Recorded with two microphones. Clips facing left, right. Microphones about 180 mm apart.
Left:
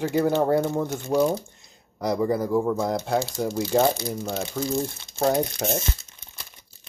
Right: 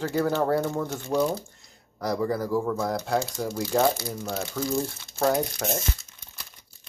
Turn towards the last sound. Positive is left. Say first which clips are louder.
# left 2 dB
turn(degrees=20)  # may be behind; listen again after turning